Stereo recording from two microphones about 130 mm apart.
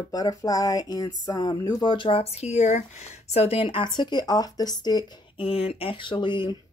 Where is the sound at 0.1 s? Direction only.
30° left (ahead or behind).